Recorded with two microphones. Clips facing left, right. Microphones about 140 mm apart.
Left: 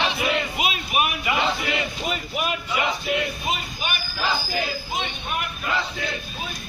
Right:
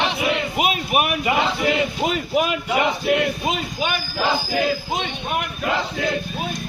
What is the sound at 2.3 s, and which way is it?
Speech, 90° right.